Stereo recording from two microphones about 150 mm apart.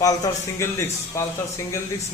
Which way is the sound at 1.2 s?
20° left (ahead or behind).